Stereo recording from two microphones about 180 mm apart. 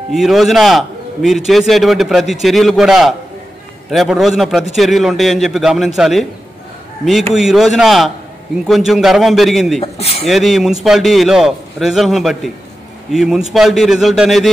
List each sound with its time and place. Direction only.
0.1 s a man's voice: centre (ahead or behind)
7.3 s a man's voice: centre (ahead or behind)
9.8 s speech: 35° left (ahead or behind)
10.2 s a man's voice: centre (ahead or behind)